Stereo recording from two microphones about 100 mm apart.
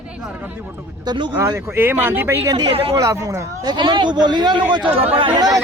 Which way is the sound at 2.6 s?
75° right (ahead or behind).